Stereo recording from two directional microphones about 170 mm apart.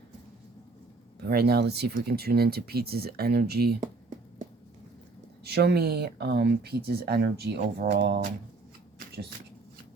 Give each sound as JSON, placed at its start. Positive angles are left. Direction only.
{"t": 1.2, "sound": "speech", "side_deg": -70}
{"t": 5.4, "sound": "speech", "side_deg": -75}